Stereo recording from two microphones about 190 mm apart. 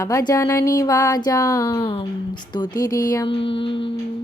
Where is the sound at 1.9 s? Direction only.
25° left (ahead or behind).